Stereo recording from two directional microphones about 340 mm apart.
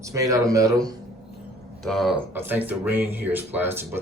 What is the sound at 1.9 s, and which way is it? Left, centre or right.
Speech, centre.